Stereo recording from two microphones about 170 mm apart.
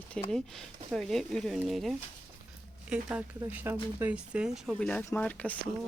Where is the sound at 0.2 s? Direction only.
5° left (ahead or behind).